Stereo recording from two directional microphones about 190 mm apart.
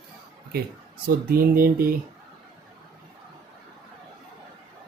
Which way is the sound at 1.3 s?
50° right (ahead or behind).